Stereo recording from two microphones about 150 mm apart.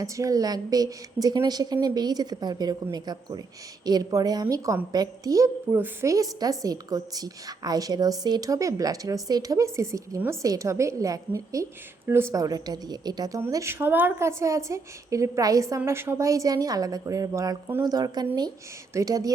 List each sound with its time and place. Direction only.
0.0 s speech: 25° right (ahead or behind)